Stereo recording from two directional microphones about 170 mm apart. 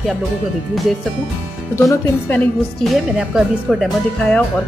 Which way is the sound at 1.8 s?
15° left (ahead or behind).